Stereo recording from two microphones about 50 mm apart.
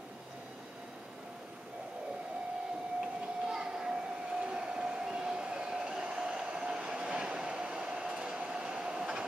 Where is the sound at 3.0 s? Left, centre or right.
Centre.